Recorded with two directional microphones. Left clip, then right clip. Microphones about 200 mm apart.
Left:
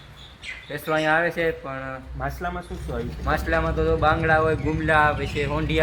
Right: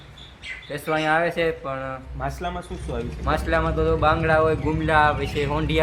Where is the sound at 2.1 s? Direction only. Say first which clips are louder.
Even; 15° left (ahead or behind).